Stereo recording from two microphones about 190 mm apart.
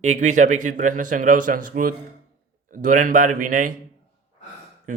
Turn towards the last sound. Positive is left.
turn(degrees=-40)  # may be behind; listen again after turning